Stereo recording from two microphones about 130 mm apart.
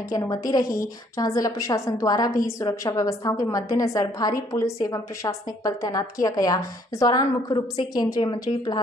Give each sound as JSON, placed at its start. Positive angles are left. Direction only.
{"t": 0.1, "sound": "a woman's voice", "side_deg": 25}